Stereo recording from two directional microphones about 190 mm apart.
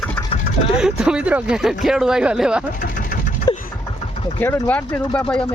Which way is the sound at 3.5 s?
20° left (ahead or behind).